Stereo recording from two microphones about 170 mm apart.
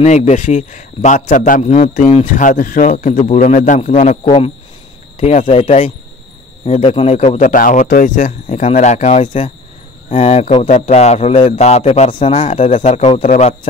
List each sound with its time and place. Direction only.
0.0 s speech: 40° left (ahead or behind)
2.3 s speech: 55° left (ahead or behind)
4.2 s a man's voice: 35° left (ahead or behind)
6.8 s a man's voice: 35° left (ahead or behind)
12.4 s speech: 45° left (ahead or behind)